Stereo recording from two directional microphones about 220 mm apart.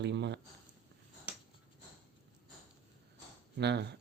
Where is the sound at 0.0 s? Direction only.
50° right (ahead or behind).